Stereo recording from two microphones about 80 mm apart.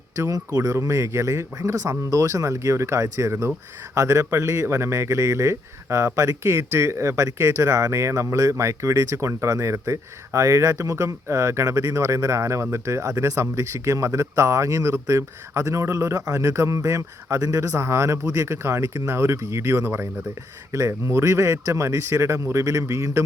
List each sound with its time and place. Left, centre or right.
0.2 s speech: right